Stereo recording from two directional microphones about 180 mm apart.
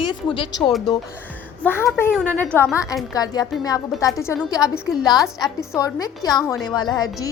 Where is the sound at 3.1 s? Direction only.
20° left (ahead or behind).